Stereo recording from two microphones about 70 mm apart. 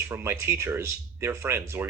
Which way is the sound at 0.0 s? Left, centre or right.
Right.